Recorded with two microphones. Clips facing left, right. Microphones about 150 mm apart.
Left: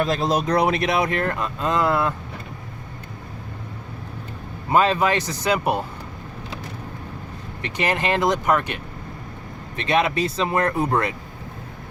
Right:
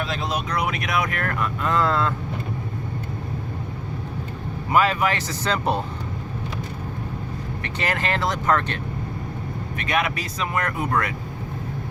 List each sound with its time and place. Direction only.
0.0 s speech: 40° left (ahead or behind); by 2.1 s 15° left (ahead or behind)
4.7 s speech: 25° left (ahead or behind)
7.6 s speech: 20° left (ahead or behind)
9.7 s speech: 25° left (ahead or behind)